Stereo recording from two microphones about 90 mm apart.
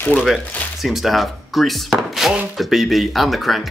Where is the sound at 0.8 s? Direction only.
Centre (ahead or behind).